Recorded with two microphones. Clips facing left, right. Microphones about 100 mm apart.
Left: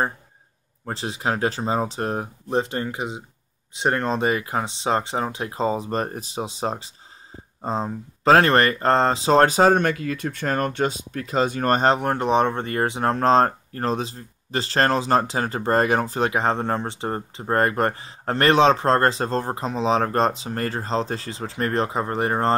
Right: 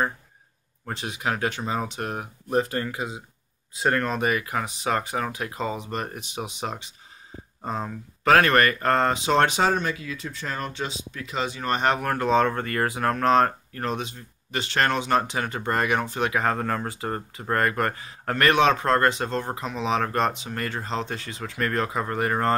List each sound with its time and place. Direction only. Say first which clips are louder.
0.8 s speech: left 3 dB; 30° left (ahead or behind)
9.8 s speech: left 6 dB; 55° left (ahead or behind)
11.8 s speech: left 4 dB; 30° left (ahead or behind)